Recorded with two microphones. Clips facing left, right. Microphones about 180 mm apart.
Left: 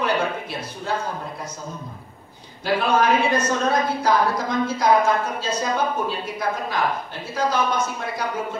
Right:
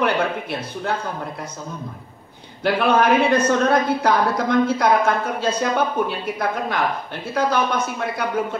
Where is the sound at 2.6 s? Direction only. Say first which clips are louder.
Right 3 dB; 60° right (ahead or behind).